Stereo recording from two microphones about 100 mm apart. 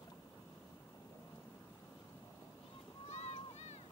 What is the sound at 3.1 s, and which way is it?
Boat, 90° left.